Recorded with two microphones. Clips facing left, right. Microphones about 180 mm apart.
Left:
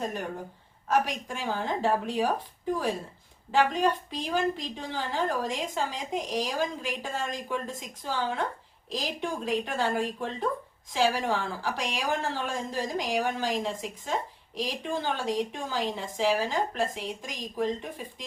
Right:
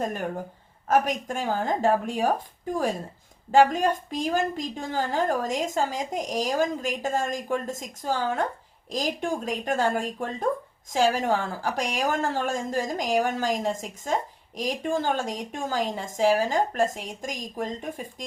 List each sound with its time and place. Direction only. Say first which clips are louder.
0.9 s a woman's voice: right 4 dB; 45° right (ahead or behind)
3.5 s a woman's voice: right 5 dB; 45° right (ahead or behind)